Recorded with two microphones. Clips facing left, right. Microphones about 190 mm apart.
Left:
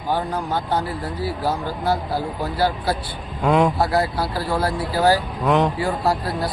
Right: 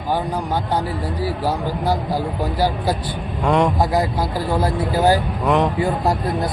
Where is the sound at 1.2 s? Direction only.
15° right (ahead or behind).